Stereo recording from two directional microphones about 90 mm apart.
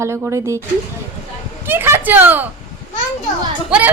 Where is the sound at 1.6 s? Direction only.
25° right (ahead or behind).